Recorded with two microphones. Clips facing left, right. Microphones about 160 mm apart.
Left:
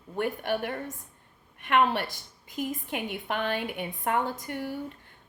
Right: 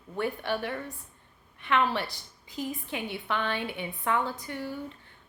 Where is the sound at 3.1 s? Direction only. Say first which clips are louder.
Left 1 dB; 45° left (ahead or behind).